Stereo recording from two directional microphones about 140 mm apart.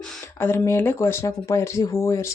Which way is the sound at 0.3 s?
15° left (ahead or behind).